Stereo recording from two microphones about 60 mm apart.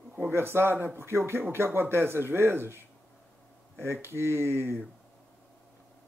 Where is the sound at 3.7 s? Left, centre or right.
Right.